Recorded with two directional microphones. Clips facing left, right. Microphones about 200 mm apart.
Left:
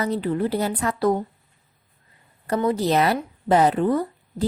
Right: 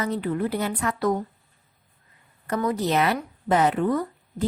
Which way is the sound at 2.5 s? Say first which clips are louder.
Left 3 dB; 30° left (ahead or behind).